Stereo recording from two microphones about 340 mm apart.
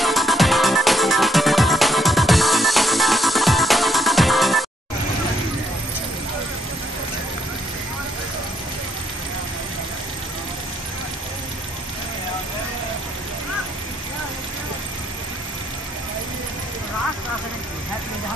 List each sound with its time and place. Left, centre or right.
0.0 s music: centre